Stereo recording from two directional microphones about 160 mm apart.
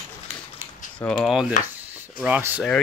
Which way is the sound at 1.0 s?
5° left (ahead or behind).